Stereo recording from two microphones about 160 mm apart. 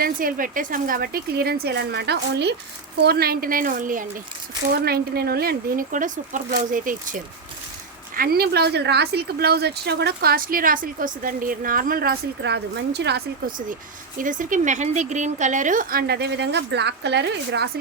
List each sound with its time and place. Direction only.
0.0 s speech: 60° right (ahead or behind); by 2.6 s 90° right
3.0 s speech: 75° right (ahead or behind); by 4.0 s 60° right (ahead or behind)
4.9 s speech: 70° right (ahead or behind); by 7.2 s 55° right (ahead or behind)
8.1 s speech: 65° right (ahead or behind); by 13.2 s 90° right
14.2 s speech: 55° right (ahead or behind); by 17.7 s 90° right